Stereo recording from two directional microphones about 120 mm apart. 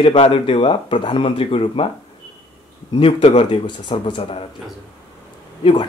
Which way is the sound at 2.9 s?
55° left (ahead or behind).